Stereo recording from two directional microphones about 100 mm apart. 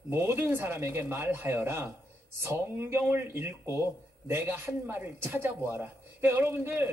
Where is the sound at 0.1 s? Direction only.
25° right (ahead or behind).